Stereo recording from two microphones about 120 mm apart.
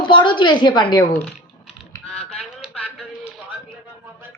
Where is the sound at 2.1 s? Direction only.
60° left (ahead or behind).